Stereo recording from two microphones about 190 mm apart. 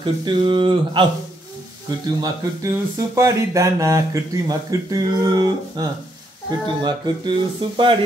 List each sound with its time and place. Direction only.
0.0 s speech: 25° right (ahead or behind)